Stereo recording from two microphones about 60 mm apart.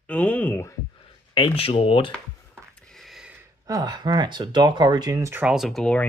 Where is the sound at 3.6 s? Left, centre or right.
Right.